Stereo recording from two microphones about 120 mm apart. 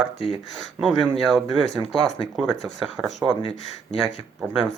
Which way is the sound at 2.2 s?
5° left (ahead or behind).